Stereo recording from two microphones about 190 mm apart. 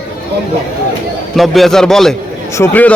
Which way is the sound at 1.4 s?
Centre (ahead or behind).